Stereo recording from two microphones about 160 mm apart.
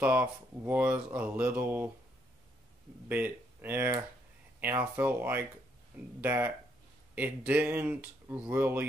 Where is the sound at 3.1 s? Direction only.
10° right (ahead or behind).